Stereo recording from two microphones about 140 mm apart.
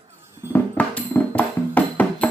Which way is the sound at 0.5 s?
10° left (ahead or behind).